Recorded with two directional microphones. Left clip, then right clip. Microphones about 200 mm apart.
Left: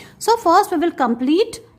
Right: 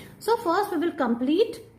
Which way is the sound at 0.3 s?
35° left (ahead or behind).